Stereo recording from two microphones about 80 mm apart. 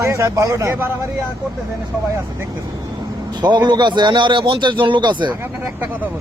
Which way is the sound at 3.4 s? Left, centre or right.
Right.